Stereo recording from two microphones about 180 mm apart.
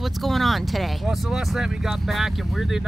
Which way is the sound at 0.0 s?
Centre (ahead or behind).